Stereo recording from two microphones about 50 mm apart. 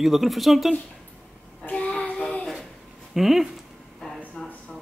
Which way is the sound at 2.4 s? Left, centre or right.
Centre.